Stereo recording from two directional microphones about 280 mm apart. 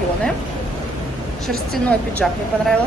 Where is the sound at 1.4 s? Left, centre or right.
Centre.